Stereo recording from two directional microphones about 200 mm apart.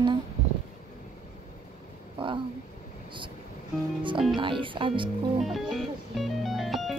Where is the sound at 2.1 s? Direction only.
25° right (ahead or behind).